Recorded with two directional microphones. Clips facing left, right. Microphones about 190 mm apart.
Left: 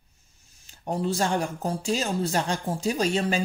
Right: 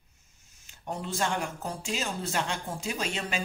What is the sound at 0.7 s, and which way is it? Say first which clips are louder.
Speech: left 8 dB; 35° left (ahead or behind).